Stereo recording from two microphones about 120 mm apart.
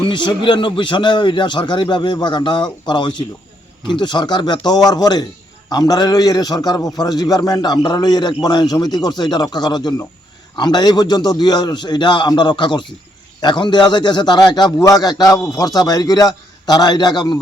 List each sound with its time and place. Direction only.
0.0 s a man's voice: 40° left (ahead or behind)